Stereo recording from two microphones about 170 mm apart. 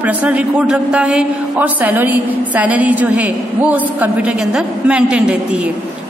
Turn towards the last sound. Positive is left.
turn(degrees=-5)  # may be behind; listen again after turning